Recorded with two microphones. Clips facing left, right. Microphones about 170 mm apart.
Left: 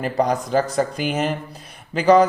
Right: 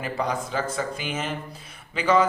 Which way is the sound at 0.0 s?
40° left (ahead or behind).